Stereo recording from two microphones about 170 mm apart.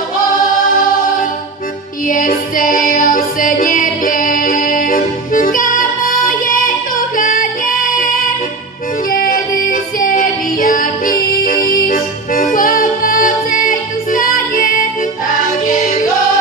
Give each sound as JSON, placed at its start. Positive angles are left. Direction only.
{"t": 2.0, "sound": "music", "side_deg": 55}